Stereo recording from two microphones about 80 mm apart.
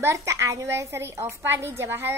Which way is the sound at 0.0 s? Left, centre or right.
Right.